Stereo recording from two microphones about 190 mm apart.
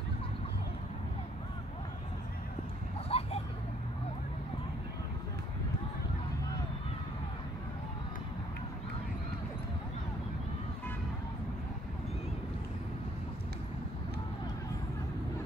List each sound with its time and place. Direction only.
3.1 s vehicle: 30° left (ahead or behind)